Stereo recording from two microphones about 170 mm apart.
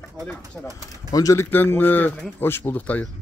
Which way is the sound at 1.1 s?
20° left (ahead or behind).